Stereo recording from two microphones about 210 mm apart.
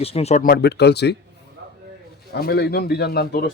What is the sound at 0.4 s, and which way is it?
Speech, 50° left (ahead or behind).